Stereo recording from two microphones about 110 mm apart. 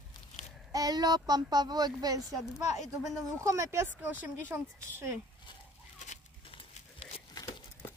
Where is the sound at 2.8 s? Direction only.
5° left (ahead or behind).